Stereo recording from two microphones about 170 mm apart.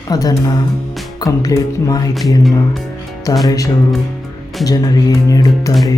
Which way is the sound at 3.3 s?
20° left (ahead or behind).